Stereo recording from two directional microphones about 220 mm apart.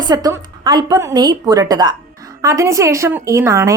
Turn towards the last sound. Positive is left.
turn(degrees=-15)  # may be behind; listen again after turning